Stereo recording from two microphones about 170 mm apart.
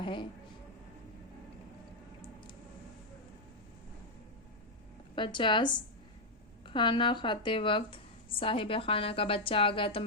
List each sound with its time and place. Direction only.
0.0 s speech: 30° left (ahead or behind)
5.1 s speech: 30° left (ahead or behind)
6.7 s a woman's voice: 30° left (ahead or behind)